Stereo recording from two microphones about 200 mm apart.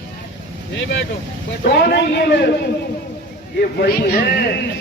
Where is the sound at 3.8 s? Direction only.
50° left (ahead or behind).